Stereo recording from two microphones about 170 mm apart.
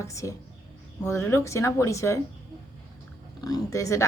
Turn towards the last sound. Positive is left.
turn(degrees=20)  # may be behind; listen again after turning